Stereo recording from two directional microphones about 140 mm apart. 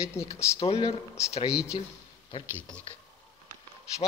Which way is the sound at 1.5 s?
5° right (ahead or behind).